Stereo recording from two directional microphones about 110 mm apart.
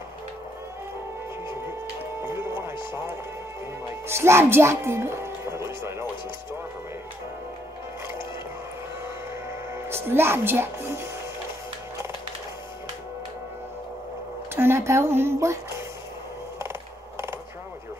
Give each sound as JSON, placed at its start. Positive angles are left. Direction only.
{"t": 2.2, "sound": "music", "side_deg": -25}
{"t": 9.8, "sound": "speech", "side_deg": -20}
{"t": 14.5, "sound": "speech", "side_deg": -20}